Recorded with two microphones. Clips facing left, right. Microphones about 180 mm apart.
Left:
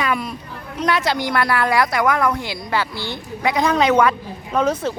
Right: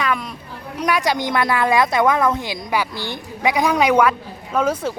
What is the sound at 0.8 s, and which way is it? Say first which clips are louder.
A woman's voice: even; 15° right (ahead or behind).